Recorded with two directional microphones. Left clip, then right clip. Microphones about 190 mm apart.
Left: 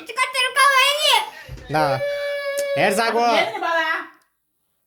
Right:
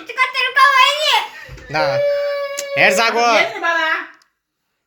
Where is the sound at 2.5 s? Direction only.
30° left (ahead or behind).